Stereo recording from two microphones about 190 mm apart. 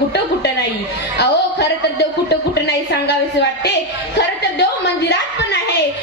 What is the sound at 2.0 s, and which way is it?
A woman's voice, 60° left (ahead or behind).